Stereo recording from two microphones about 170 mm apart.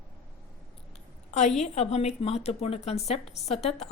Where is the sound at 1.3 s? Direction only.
40° left (ahead or behind).